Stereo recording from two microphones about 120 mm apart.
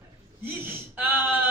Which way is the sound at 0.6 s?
15° right (ahead or behind).